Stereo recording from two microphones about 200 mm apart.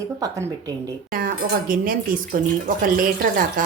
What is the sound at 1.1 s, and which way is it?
Dishes, 45° right (ahead or behind).